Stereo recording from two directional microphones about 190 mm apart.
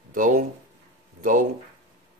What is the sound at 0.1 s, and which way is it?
Speech, 45° right (ahead or behind).